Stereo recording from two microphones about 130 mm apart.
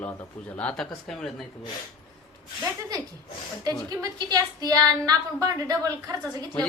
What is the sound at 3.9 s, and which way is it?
Speech, 30° right (ahead or behind).